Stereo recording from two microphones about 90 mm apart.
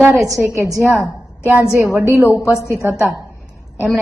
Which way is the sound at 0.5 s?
35° right (ahead or behind).